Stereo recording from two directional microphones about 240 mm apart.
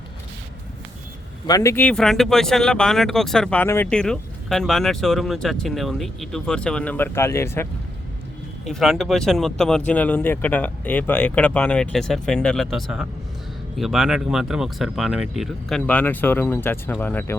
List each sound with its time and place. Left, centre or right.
1.5 s speech: centre